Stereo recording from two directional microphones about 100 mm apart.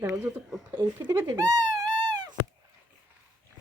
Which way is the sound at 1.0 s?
30° right (ahead or behind).